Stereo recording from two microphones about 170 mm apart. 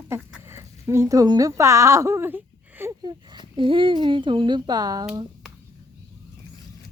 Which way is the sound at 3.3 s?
30° right (ahead or behind).